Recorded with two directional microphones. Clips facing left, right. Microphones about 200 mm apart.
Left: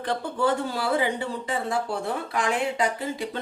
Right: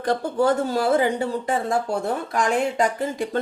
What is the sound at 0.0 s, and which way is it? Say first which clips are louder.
Speech: right 5 dB; 40° right (ahead or behind).